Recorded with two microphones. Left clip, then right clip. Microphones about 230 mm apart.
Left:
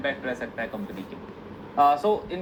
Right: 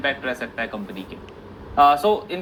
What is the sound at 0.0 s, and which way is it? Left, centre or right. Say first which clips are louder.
Speech: right 5 dB; right.